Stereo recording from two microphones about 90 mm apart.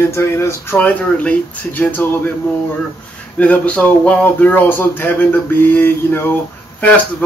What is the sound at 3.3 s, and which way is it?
Speech, 15° left (ahead or behind).